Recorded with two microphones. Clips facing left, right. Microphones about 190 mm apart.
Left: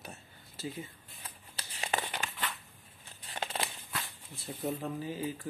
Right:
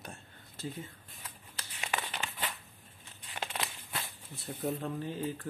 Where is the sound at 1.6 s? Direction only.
35° left (ahead or behind).